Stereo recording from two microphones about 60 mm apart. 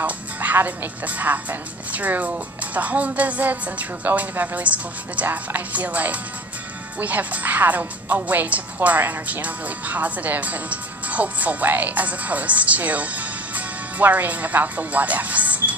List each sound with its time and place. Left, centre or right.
0.0 s a woman's voice: right